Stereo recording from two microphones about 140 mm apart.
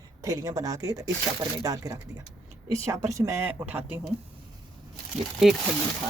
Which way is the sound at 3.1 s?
20° right (ahead or behind).